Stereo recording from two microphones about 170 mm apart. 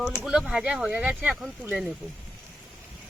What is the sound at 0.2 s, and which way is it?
Speech, 5° right (ahead or behind).